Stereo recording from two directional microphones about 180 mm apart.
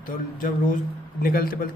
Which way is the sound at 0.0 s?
50° left (ahead or behind).